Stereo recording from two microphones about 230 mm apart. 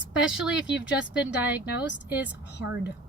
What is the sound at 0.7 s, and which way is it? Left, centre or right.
Speech, left.